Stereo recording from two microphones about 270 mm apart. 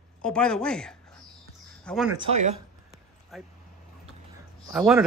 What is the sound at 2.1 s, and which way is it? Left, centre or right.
Speech, right.